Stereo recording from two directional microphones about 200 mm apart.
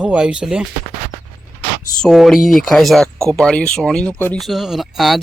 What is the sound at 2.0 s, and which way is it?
Speech, centre (ahead or behind).